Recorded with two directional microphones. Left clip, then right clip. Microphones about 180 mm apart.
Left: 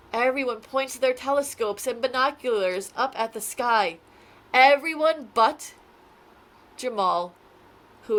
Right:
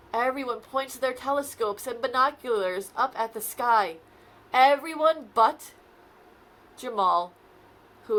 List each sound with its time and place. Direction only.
0.1 s speech: 50° left (ahead or behind)
6.7 s speech: 45° left (ahead or behind)